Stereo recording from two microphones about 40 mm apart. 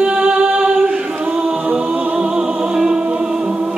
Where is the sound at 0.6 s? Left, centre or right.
Centre.